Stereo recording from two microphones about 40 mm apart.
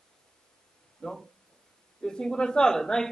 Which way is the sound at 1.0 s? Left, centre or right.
Centre.